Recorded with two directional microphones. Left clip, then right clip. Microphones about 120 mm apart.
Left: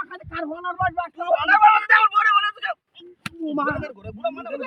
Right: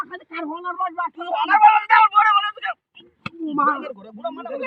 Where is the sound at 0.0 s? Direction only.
20° left (ahead or behind).